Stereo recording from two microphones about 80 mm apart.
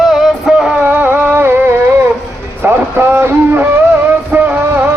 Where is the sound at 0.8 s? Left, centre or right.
Right.